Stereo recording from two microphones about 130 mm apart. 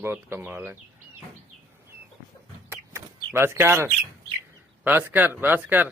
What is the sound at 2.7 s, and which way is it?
Bird, 20° right (ahead or behind).